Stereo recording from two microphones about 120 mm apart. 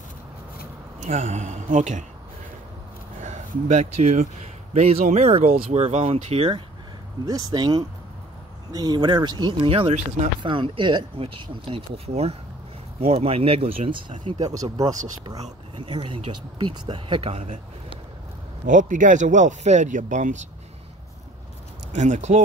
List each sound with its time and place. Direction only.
1.0 s speech: 75° right (ahead or behind); by 2.0 s 90° right
3.3 s speech: 80° right
4.7 s speech: 70° right (ahead or behind)
7.2 s speech: 30° right (ahead or behind)
9.7 s speech: 55° right (ahead or behind)
11.1 s speech: 50° right (ahead or behind)
14.6 s speech: 30° right (ahead or behind)
15.7 s speech: 45° right (ahead or behind)
18.7 s speech: 90° right
21.9 s speech: 80° right